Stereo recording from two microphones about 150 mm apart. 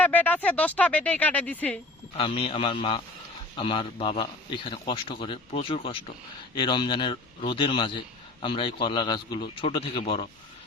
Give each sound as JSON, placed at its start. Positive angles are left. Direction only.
{"t": 0.0, "sound": "speech", "side_deg": 10}
{"t": 2.1, "sound": "a man's voice", "side_deg": 35}